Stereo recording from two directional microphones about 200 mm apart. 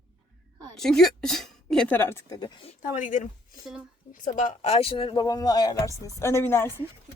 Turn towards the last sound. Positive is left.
turn(degrees=10)  # may be behind; listen again after turning